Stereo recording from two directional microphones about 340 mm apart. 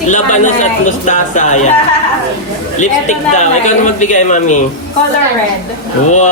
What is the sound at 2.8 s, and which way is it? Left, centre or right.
A man's voice, left.